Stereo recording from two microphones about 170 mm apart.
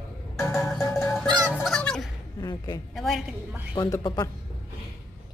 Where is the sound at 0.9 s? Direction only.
15° left (ahead or behind).